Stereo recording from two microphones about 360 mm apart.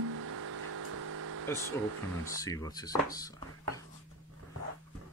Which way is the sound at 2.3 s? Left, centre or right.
Centre.